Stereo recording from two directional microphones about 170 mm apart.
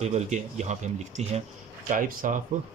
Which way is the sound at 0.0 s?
40° right (ahead or behind).